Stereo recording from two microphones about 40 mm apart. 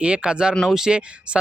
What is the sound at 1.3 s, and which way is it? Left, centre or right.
Speech, right.